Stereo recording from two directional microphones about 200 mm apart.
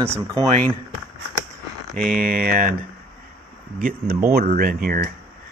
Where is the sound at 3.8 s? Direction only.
45° right (ahead or behind).